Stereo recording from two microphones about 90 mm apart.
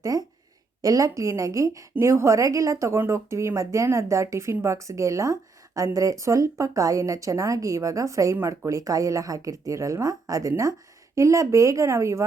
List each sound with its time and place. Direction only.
0.0 s speech: 40° right (ahead or behind)